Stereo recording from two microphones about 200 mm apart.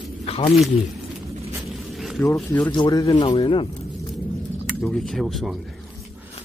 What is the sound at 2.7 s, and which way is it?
Speech, 20° left (ahead or behind).